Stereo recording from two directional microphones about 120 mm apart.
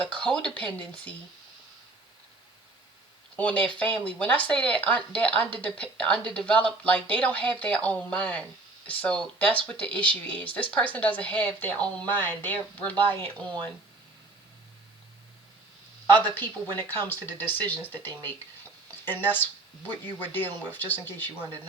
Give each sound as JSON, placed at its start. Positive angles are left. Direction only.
{"t": 0.0, "sound": "speech", "side_deg": 10}
{"t": 3.3, "sound": "speech", "side_deg": 10}
{"t": 16.3, "sound": "speech", "side_deg": 15}